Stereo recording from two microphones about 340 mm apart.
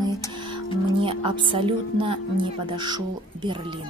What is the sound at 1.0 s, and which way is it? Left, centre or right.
A woman's voice, centre.